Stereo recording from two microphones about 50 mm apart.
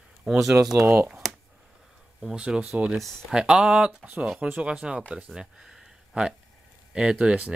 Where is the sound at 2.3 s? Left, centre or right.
Centre.